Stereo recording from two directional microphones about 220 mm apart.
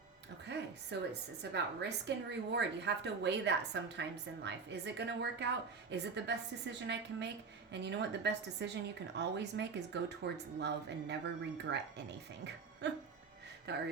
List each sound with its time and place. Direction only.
0.5 s a sound: 50° right (ahead or behind)
0.9 s a woman's voice: 50° right (ahead or behind)
13.7 s a woman's voice: 50° right (ahead or behind)